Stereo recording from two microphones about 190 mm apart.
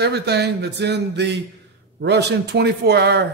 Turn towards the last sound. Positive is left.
turn(degrees=-60)  # may be behind; listen again after turning